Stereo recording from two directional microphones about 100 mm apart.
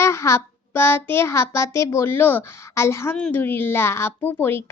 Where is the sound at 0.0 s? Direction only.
25° left (ahead or behind).